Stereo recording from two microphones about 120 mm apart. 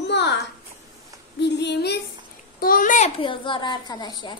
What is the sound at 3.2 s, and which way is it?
A woman's voice, 45° left (ahead or behind).